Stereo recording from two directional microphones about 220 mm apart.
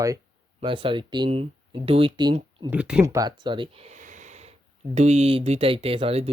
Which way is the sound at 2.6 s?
5° right (ahead or behind).